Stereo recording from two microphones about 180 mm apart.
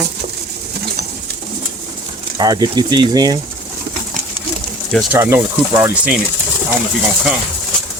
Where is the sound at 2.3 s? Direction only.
20° right (ahead or behind).